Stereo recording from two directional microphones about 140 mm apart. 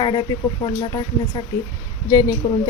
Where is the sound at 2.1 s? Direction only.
25° left (ahead or behind).